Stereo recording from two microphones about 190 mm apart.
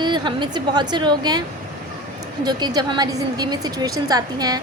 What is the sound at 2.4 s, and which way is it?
A woman's voice, 20° right (ahead or behind).